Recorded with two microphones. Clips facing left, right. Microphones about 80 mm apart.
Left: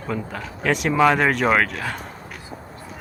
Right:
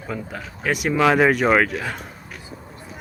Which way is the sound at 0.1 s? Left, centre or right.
Centre.